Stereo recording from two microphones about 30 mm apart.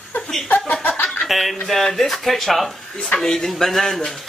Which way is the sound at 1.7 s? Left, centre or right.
Centre.